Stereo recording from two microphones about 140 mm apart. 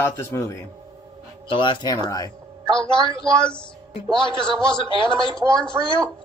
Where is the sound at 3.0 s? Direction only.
40° left (ahead or behind).